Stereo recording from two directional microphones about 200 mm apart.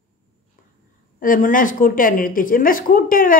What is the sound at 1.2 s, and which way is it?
A woman's voice, 45° left (ahead or behind).